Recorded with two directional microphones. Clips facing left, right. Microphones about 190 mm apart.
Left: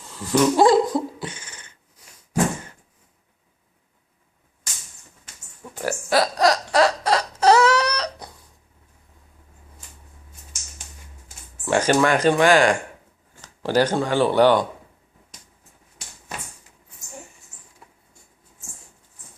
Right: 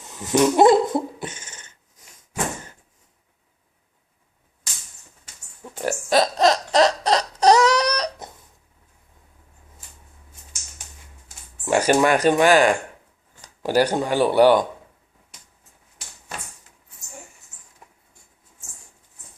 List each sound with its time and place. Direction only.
0.0 s cat: 20° right (ahead or behind)
5.8 s a sound: 20° right (ahead or behind)
11.6 s speech: 10° right (ahead or behind)